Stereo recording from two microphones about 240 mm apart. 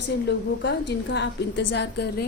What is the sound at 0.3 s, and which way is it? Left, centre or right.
A woman's voice, left.